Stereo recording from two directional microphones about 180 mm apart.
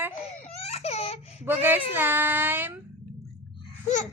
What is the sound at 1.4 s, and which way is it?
Speech, 10° right (ahead or behind).